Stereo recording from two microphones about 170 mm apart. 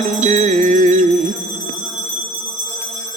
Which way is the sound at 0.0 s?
45° right (ahead or behind).